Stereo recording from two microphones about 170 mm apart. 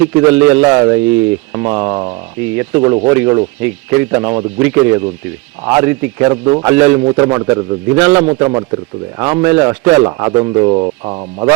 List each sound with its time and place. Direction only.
0.0 s speech: 15° right (ahead or behind)
6.2 s speech: 25° right (ahead or behind)
6.7 s speech: 15° right (ahead or behind)
8.4 s speech: 25° right (ahead or behind)